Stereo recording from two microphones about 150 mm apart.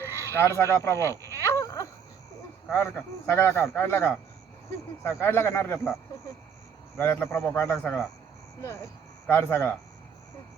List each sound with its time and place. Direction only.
0.0 s speech: 20° left (ahead or behind)
1.5 s a sound: 20° left (ahead or behind)
2.6 s speech: 20° left (ahead or behind)
6.9 s speech: 15° left (ahead or behind)
9.2 s speech: 15° left (ahead or behind)